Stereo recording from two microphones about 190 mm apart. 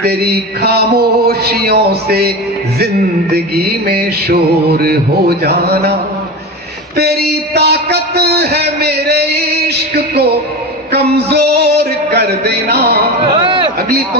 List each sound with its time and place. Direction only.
0.0 s a man's voice: 55° right (ahead or behind)
3.3 s a man's voice: 55° right (ahead or behind)
6.9 s a man's voice: 55° right (ahead or behind)
13.4 s a sound: 25° right (ahead or behind)